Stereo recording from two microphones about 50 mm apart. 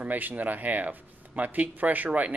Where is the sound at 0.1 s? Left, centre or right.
Right.